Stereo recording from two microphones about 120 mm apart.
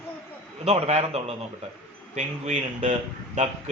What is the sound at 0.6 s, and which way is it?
Speech, 60° right (ahead or behind).